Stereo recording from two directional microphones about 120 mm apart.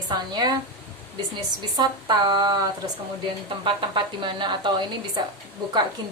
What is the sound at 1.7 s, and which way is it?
A woman's voice, 35° right (ahead or behind).